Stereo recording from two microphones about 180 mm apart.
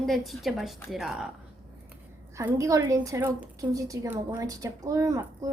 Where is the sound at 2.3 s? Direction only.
15° right (ahead or behind).